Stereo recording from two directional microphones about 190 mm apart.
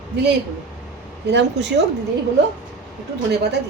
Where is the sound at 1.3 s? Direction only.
65° right (ahead or behind).